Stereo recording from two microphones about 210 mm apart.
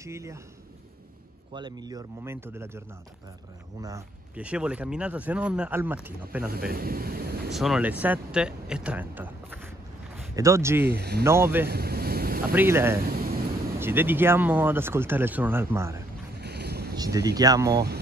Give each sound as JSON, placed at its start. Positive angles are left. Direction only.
{"t": 0.0, "sound": "speech", "side_deg": -15}
{"t": 1.5, "sound": "speech", "side_deg": -20}
{"t": 4.4, "sound": "speech", "side_deg": -5}
{"t": 6.5, "sound": "speech", "side_deg": -45}
{"t": 7.5, "sound": "speech", "side_deg": 0}
{"t": 10.9, "sound": "speech", "side_deg": -50}
{"t": 11.2, "sound": "speech", "side_deg": -10}
{"t": 11.6, "sound": "boat", "side_deg": -50}
{"t": 12.5, "sound": "speech", "side_deg": -10}
{"t": 13.0, "sound": "a sound", "side_deg": -45}
{"t": 13.7, "sound": "speech", "side_deg": -10}
{"t": 16.3, "sound": "boat", "side_deg": -50}
{"t": 16.9, "sound": "speech", "side_deg": -20}